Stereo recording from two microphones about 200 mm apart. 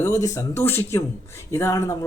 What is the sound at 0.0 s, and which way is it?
A man's voice, 15° left (ahead or behind).